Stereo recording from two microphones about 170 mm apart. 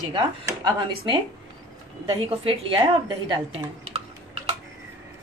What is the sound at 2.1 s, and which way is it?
A woman's voice, 30° right (ahead or behind).